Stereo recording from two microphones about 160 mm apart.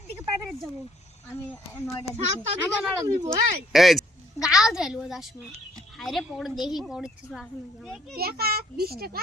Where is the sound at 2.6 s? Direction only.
20° right (ahead or behind).